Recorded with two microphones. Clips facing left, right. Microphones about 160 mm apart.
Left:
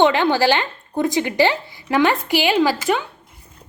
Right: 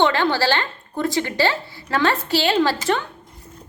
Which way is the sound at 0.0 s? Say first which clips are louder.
Left 3 dB; 15° left (ahead or behind).